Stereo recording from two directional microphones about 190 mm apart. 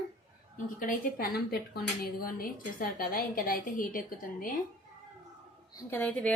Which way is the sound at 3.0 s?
50° left (ahead or behind).